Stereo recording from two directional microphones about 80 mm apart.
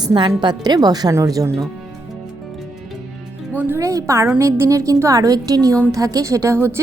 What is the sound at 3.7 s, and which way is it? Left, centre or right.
A woman's voice, right.